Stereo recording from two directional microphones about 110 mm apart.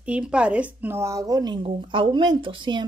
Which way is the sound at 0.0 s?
10° right (ahead or behind).